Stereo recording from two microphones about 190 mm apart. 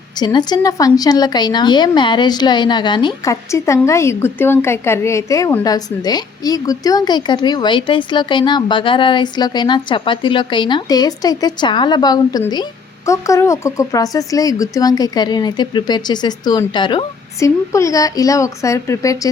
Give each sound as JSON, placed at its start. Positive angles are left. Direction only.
{"t": 0.2, "sound": "speech", "side_deg": 20}